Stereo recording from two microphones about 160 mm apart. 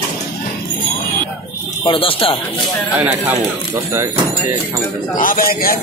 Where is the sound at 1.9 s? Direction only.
35° left (ahead or behind).